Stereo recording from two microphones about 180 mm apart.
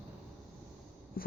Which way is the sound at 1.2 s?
55° left (ahead or behind).